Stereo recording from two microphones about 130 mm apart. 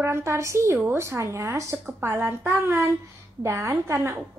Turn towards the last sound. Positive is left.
turn(degrees=-20)  # may be behind; listen again after turning